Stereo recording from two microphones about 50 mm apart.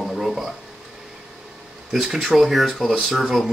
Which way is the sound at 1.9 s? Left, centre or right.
Centre.